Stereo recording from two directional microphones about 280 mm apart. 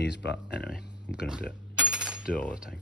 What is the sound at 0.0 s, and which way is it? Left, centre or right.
Speech, left.